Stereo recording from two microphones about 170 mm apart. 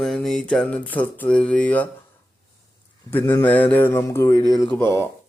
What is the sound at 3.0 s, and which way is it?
Speech, 10° left (ahead or behind).